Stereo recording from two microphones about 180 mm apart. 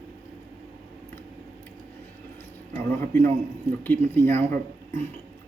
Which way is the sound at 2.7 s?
10° left (ahead or behind).